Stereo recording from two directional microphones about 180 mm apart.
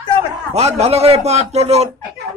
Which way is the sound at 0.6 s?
35° right (ahead or behind).